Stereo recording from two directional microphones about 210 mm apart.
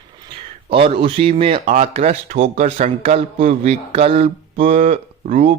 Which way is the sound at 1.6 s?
40° right (ahead or behind).